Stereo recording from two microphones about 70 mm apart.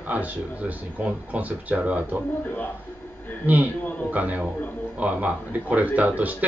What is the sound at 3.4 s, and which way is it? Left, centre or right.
Speech, right.